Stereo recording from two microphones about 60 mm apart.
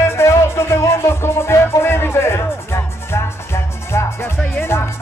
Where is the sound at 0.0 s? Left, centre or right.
Left.